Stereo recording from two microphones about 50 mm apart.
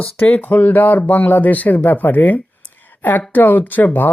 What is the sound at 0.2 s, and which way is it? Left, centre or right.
A woman's voice, left.